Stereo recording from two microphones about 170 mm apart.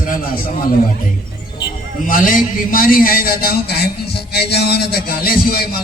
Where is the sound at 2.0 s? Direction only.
50° left (ahead or behind).